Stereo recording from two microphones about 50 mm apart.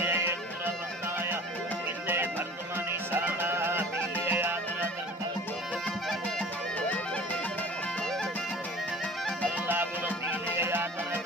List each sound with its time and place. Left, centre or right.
0.0 s music: right
2.0 s music: right
9.7 s music: right